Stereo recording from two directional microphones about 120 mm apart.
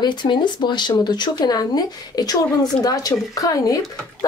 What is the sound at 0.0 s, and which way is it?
Speech, 40° left (ahead or behind).